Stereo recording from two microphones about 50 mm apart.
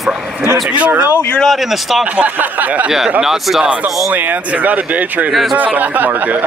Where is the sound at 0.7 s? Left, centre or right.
Right.